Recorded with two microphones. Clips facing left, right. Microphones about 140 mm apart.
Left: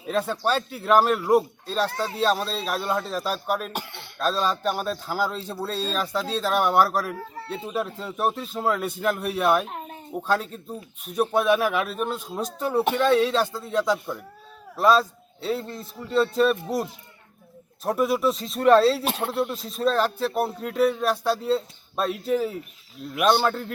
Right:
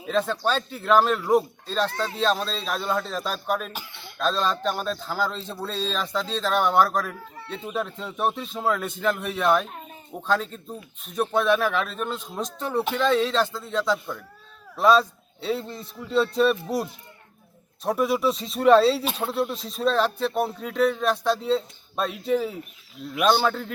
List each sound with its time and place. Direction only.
0.1 s a man's voice: 10° left (ahead or behind)
3.7 s speech: 60° left (ahead or behind)
4.2 s a man's voice: 5° left (ahead or behind)
14.8 s speech: centre (ahead or behind)